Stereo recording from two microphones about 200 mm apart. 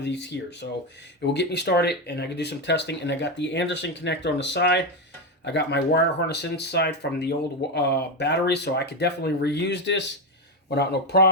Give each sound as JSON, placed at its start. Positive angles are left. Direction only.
{"t": 0.0, "sound": "speech", "side_deg": 60}